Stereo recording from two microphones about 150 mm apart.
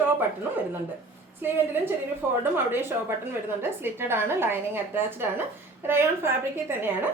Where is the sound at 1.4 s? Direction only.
15° right (ahead or behind).